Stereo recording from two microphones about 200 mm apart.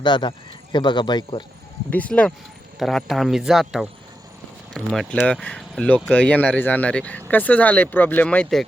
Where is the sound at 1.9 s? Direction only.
5° left (ahead or behind).